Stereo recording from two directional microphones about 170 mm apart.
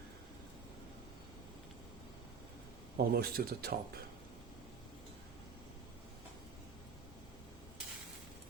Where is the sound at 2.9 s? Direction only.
65° right (ahead or behind).